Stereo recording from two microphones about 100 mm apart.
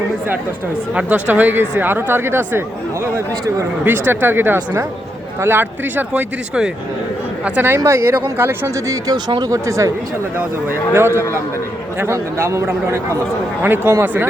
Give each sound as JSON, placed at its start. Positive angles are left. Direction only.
{"t": 0.9, "sound": "speech", "side_deg": -15}
{"t": 3.8, "sound": "speech", "side_deg": -20}